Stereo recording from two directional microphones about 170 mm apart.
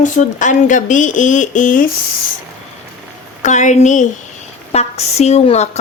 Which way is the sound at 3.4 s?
45° left (ahead or behind).